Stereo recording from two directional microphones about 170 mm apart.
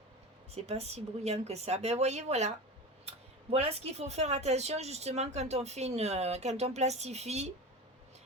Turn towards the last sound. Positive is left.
turn(degrees=-40)  # may be behind; listen again after turning